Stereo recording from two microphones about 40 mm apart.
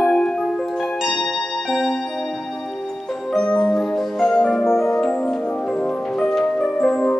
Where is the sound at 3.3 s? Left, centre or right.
Left.